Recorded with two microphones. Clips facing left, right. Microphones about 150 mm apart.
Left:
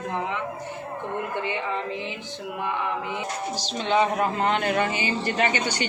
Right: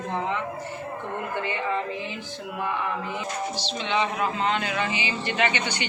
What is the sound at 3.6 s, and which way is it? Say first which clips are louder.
Speech: left 5 dB; 45° left (ahead or behind).